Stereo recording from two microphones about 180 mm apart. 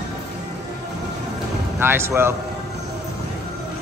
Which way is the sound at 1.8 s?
15° right (ahead or behind).